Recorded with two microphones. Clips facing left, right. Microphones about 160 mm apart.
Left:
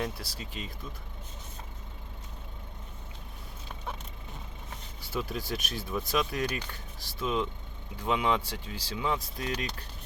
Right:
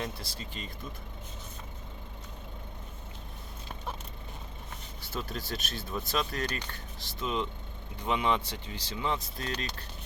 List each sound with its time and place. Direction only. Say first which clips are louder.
0.3 s speech: left 1 dB; 5° left (ahead or behind)
5.1 s speech: left 3 dB; 10° left (ahead or behind)